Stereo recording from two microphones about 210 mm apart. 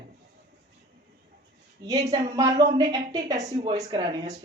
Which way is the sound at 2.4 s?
20° right (ahead or behind).